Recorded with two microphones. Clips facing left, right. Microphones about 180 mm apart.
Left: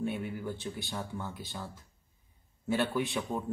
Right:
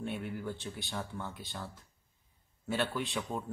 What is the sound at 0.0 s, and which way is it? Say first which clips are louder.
Speech: left 3 dB; 5° left (ahead or behind).